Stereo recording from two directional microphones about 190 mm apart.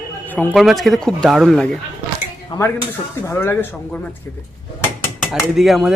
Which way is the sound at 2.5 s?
25° left (ahead or behind).